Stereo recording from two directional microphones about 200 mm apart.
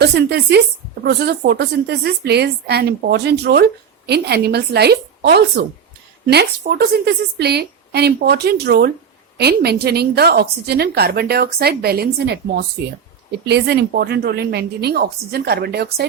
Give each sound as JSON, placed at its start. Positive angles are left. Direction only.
{"t": 0.0, "sound": "a woman's voice", "side_deg": -55}